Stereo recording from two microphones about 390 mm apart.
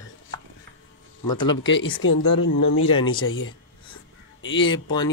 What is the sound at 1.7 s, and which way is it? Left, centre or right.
Speech, left.